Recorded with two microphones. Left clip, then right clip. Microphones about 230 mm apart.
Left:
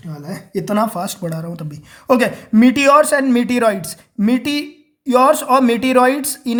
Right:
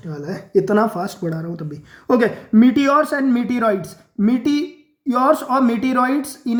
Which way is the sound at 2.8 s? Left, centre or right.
Left.